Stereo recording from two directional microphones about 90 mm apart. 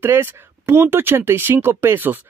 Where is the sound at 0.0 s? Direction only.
25° right (ahead or behind).